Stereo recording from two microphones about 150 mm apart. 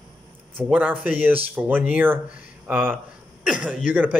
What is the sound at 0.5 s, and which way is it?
Speech, 10° right (ahead or behind).